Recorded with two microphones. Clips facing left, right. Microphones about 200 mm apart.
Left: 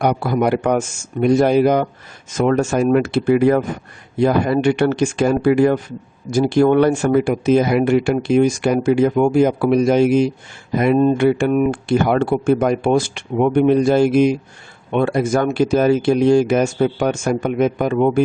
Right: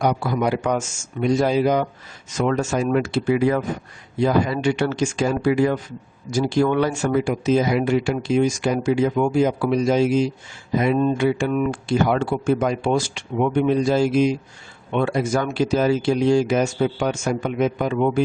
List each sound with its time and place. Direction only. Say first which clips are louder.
0.0 s speech: left 4 dB; 60° left (ahead or behind)